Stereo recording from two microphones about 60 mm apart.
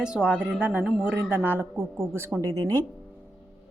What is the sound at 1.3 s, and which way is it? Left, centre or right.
Speech, right.